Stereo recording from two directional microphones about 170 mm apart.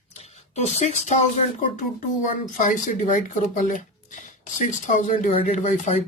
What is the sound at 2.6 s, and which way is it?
Speech, 50° left (ahead or behind).